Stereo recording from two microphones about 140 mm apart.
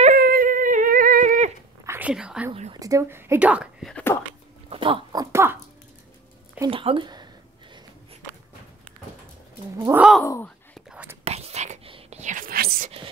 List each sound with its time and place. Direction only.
0.1 s dog: 80° right
1.9 s speech: 10° right (ahead or behind)
2.7 s a woman's voice: 25° right (ahead or behind)
3.8 s wail: 10° left (ahead or behind)
4.6 s speech: 40° right (ahead or behind)
5.2 s a woman's voice: 20° right (ahead or behind)
6.7 s speech: 40° right (ahead or behind)
9.9 s speech: 5° right (ahead or behind)
10.2 s speech: 20° left (ahead or behind)
10.9 s whispering: 10° right (ahead or behind)
11.2 s whispering: 50° right (ahead or behind); by 12.9 s 90° right